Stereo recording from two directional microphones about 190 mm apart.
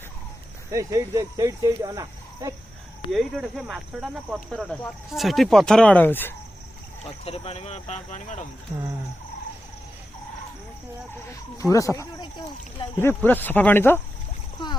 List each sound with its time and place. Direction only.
0.7 s speech: 15° right (ahead or behind)
3.1 s speech: centre (ahead or behind)
7.3 s speech: 30° left (ahead or behind)
11.7 s speech: 15° left (ahead or behind)